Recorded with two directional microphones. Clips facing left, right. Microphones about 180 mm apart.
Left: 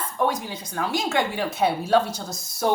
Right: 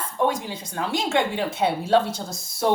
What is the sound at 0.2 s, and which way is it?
Speech, 25° right (ahead or behind).